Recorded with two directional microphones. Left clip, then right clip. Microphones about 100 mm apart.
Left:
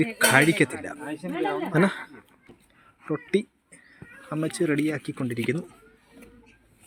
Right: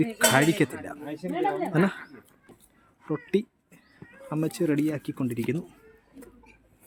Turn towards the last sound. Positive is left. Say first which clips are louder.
# left 2 dB
turn(degrees=-15)  # may be behind; listen again after turning